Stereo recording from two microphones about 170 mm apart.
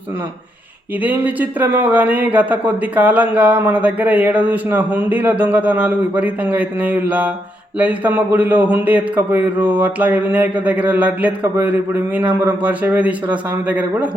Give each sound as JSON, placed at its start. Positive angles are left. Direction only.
{"t": 1.0, "sound": "speech", "side_deg": -10}